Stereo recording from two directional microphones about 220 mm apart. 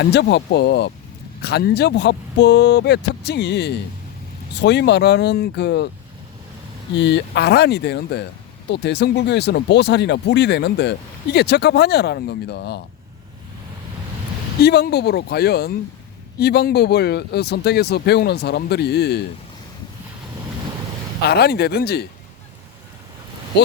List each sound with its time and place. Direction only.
0.0 s speech: 50° left (ahead or behind)
6.9 s speech: 50° left (ahead or behind)
14.6 s speech: 45° left (ahead or behind)
21.2 s speech: 45° left (ahead or behind)